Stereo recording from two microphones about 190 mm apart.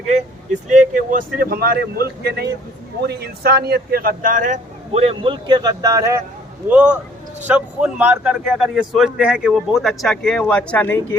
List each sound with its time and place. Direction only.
0.7 s speech: 45° right (ahead or behind)
5.0 s speech: 25° right (ahead or behind)
6.7 s a man's voice: 5° right (ahead or behind); by 11.2 s 10° left (ahead or behind)